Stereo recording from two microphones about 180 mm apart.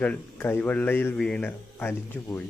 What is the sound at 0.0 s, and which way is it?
A man's voice, 10° left (ahead or behind).